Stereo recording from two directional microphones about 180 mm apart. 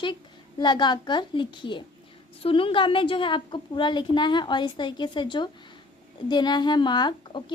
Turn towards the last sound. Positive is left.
turn(degrees=25)  # may be behind; listen again after turning